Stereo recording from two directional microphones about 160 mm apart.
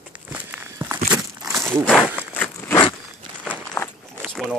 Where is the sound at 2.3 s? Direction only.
10° left (ahead or behind).